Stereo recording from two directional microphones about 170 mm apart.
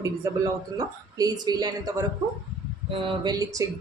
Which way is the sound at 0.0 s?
20° right (ahead or behind).